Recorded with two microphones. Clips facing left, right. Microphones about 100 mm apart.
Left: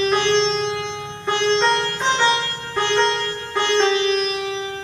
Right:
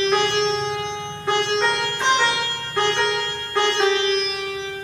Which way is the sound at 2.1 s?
25° left (ahead or behind).